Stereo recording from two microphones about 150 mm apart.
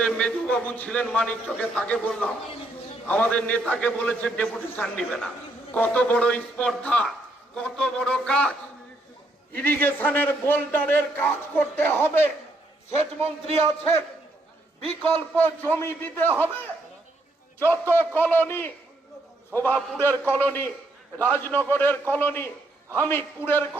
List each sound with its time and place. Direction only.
0.0 s a man's voice: 5° left (ahead or behind)
13.2 s speech: 40° right (ahead or behind)
15.0 s a man's voice: 15° left (ahead or behind)
17.9 s a man's voice: 15° left (ahead or behind)